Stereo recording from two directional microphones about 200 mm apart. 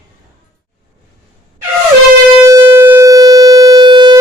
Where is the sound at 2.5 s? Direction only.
15° right (ahead or behind).